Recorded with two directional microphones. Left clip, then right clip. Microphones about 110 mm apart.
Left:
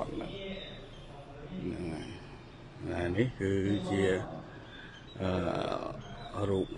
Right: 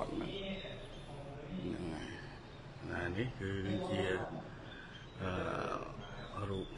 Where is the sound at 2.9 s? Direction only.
40° left (ahead or behind).